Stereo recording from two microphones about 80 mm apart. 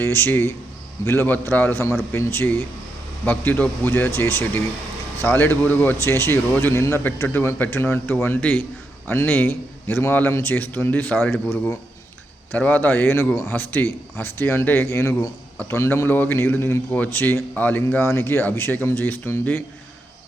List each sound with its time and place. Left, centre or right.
0.0 s a man's voice: left
12.5 s a man's voice: left
18.0 s speech: left